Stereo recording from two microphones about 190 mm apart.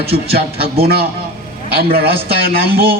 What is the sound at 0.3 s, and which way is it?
A man's voice, 55° right (ahead or behind).